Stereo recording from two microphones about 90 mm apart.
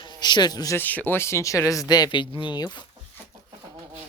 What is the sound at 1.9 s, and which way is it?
Speech, 55° left (ahead or behind).